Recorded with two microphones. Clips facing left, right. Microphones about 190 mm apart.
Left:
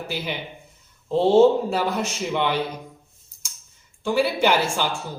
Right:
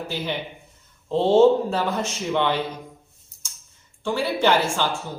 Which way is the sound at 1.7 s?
10° left (ahead or behind).